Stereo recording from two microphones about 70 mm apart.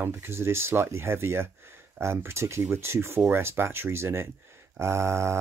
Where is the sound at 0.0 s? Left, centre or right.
Right.